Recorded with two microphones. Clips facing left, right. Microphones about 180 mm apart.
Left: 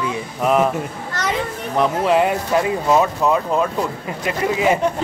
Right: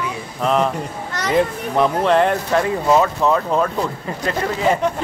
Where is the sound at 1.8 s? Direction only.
5° left (ahead or behind).